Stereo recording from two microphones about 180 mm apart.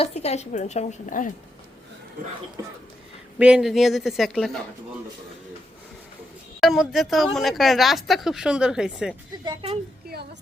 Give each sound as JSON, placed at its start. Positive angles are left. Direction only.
{"t": 0.0, "sound": "a woman's voice", "side_deg": 35}
{"t": 2.6, "sound": "speech", "side_deg": -20}
{"t": 3.3, "sound": "speech", "side_deg": -5}
{"t": 6.6, "sound": "speech", "side_deg": 0}
{"t": 9.4, "sound": "speech", "side_deg": -30}